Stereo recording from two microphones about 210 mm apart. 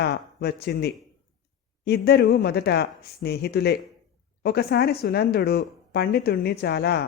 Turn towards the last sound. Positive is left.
turn(degrees=50)  # may be behind; listen again after turning